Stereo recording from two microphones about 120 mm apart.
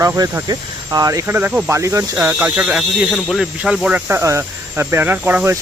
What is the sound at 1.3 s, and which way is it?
Speech, 15° right (ahead or behind).